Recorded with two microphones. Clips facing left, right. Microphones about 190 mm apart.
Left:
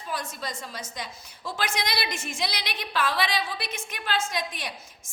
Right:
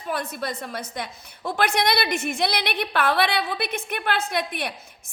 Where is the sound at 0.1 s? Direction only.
60° right (ahead or behind).